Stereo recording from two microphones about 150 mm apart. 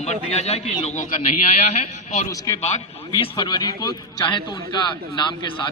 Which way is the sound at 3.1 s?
30° left (ahead or behind).